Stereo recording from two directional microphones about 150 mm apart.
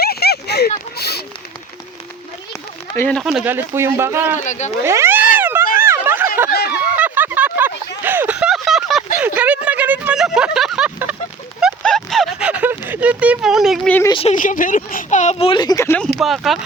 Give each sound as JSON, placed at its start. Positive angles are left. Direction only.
{"t": 0.0, "sound": "a sound", "side_deg": 90}
{"t": 2.9, "sound": "speech", "side_deg": 15}
{"t": 3.2, "sound": "speech", "side_deg": -5}
{"t": 3.5, "sound": "speech", "side_deg": -15}
{"t": 4.4, "sound": "speech", "side_deg": 50}
{"t": 4.8, "sound": "cat", "side_deg": -15}
{"t": 5.7, "sound": "a sound", "side_deg": -15}
{"t": 6.5, "sound": "a sound", "side_deg": 90}
{"t": 6.9, "sound": "a sound", "side_deg": -10}
{"t": 14.1, "sound": "a woman's voice", "side_deg": 40}
{"t": 14.3, "sound": "a woman's voice", "side_deg": 60}
{"t": 16.1, "sound": "speech", "side_deg": 0}